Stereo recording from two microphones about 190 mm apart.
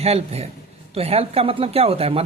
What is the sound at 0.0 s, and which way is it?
Speech, 35° right (ahead or behind).